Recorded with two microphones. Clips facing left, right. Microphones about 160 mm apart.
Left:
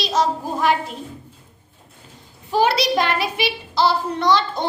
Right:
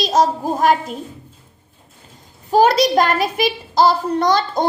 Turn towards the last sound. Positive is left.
turn(degrees=-45)  # may be behind; listen again after turning